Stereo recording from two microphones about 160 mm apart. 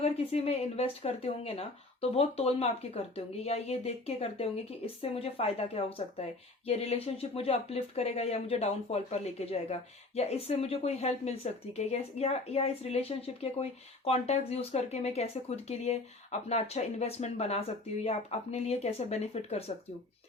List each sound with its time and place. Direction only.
0.0 s speech: 40° left (ahead or behind)